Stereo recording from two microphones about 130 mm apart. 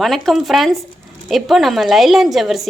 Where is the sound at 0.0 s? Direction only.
Centre (ahead or behind).